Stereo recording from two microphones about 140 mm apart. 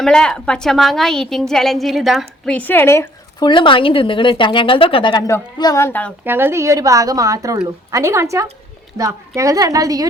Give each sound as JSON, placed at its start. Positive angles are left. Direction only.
{"t": 0.0, "sound": "a woman's voice", "side_deg": 5}
{"t": 2.6, "sound": "speech", "side_deg": 15}
{"t": 3.4, "sound": "a woman's voice", "side_deg": 35}
{"t": 6.2, "sound": "a woman's voice", "side_deg": -15}